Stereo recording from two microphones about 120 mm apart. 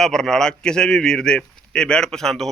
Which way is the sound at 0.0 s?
5° left (ahead or behind).